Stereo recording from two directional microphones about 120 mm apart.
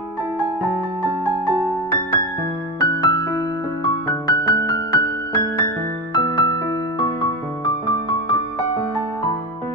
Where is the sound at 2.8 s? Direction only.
35° left (ahead or behind).